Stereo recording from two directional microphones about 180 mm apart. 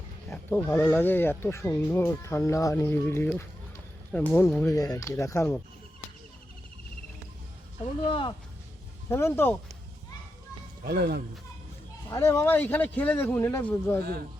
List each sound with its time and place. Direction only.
0.3 s speech: 10° left (ahead or behind)
8.0 s speech: 30° left (ahead or behind)
9.0 s speech: 15° left (ahead or behind)
10.8 s speech: 60° right (ahead or behind)
12.1 s speech: 15° left (ahead or behind)
14.0 s speech: 60° right (ahead or behind)